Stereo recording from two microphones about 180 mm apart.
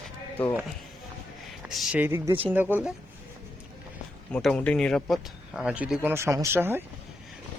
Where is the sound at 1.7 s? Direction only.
Centre (ahead or behind).